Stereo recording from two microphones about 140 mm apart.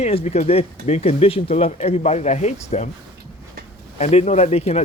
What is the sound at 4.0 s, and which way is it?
Speech, 55° left (ahead or behind).